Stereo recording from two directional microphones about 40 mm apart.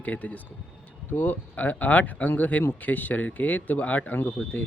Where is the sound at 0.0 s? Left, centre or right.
Left.